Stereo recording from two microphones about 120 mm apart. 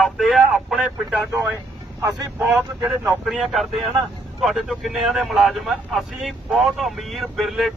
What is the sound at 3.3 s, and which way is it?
Speech, centre (ahead or behind).